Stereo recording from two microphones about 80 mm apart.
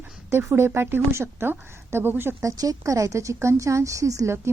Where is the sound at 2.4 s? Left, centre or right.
Right.